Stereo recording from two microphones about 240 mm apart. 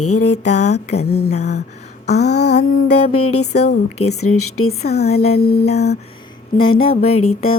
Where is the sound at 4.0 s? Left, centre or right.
Left.